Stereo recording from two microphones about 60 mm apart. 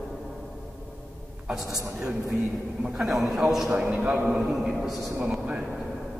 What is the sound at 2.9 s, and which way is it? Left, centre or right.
Speech, centre.